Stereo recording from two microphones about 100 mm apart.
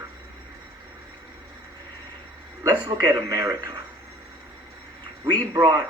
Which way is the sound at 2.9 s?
30° right (ahead or behind).